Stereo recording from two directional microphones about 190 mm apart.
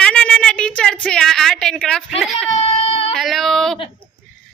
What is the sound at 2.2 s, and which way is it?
Speech, centre (ahead or behind).